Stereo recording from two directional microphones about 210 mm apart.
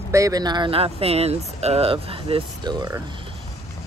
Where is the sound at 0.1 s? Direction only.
15° right (ahead or behind).